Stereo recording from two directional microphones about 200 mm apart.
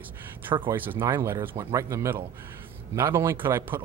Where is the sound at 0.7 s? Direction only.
10° right (ahead or behind).